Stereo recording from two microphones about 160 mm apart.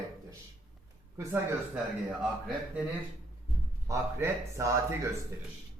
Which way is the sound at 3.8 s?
20° right (ahead or behind).